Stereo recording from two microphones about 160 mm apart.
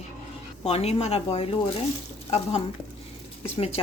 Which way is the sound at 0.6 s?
40° left (ahead or behind).